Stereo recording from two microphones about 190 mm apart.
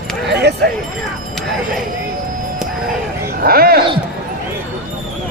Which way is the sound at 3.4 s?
55° right (ahead or behind).